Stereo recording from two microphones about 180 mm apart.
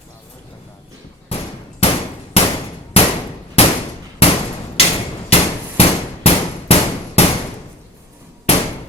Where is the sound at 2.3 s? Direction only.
35° left (ahead or behind).